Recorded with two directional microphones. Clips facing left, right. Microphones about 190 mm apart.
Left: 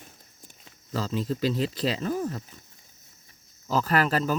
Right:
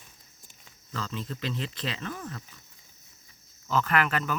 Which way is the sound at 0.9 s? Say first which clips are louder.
Left 7 dB; 35° left (ahead or behind).